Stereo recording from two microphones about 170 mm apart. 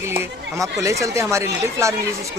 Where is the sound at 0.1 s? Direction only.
15° right (ahead or behind).